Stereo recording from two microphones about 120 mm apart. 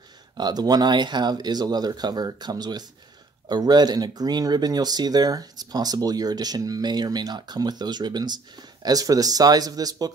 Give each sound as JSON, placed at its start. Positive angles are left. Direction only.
{"t": 0.4, "sound": "speech", "side_deg": -35}